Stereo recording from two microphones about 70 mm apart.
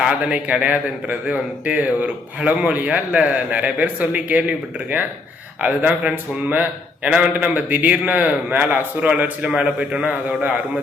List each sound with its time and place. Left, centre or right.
0.0 s a man's voice: centre
9.5 s a man's voice: centre